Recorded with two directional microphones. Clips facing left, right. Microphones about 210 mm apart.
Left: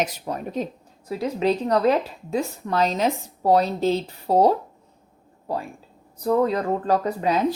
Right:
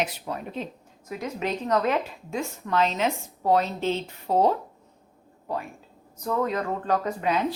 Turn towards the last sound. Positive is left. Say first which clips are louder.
# left 3 dB
turn(degrees=35)  # may be behind; listen again after turning